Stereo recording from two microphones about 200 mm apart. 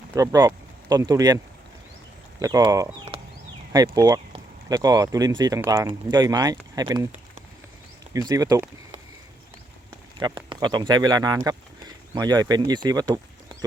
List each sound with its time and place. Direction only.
0.1 s speech: 15° right (ahead or behind)
2.4 s speech: 20° right (ahead or behind)
8.1 s speech: 15° right (ahead or behind)
10.2 s speech: 20° right (ahead or behind)